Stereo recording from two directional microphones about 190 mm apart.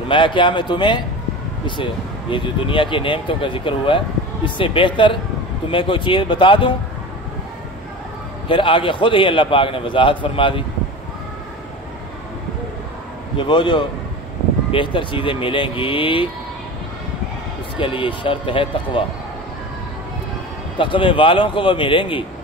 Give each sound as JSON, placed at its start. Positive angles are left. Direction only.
{"t": 0.1, "sound": "speech", "side_deg": 25}
{"t": 8.5, "sound": "speech", "side_deg": 25}
{"t": 13.4, "sound": "speech", "side_deg": 25}
{"t": 17.7, "sound": "speech", "side_deg": 25}
{"t": 20.7, "sound": "speech", "side_deg": 25}